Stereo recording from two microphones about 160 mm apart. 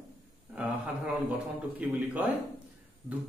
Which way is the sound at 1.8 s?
10° right (ahead or behind).